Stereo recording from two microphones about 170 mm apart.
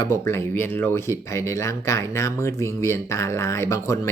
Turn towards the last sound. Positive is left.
turn(degrees=15)  # may be behind; listen again after turning